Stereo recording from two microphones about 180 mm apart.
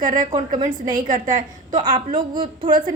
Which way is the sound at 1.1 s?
45° right (ahead or behind).